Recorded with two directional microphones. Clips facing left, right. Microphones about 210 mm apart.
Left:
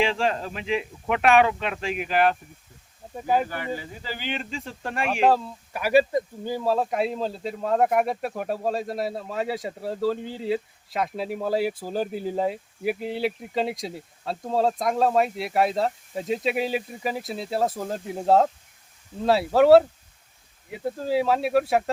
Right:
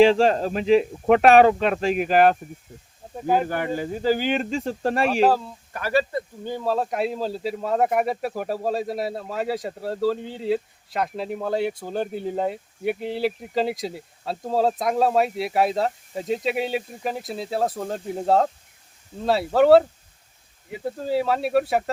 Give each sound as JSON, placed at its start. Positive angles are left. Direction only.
{"t": 0.0, "sound": "speech", "side_deg": -40}
{"t": 3.5, "sound": "speech", "side_deg": -50}
{"t": 5.2, "sound": "speech", "side_deg": 0}
{"t": 5.7, "sound": "speech", "side_deg": 10}